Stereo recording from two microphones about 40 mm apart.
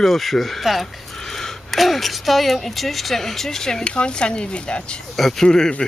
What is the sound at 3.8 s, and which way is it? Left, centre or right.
Speech, left.